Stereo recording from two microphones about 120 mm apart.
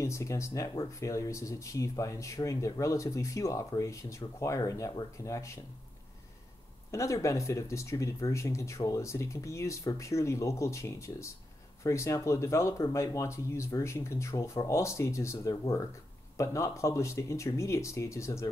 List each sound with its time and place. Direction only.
0.0 s speech: 25° left (ahead or behind)
6.9 s speech: 25° left (ahead or behind)